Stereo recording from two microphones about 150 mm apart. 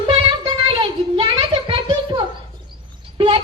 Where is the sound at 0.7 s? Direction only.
35° right (ahead or behind).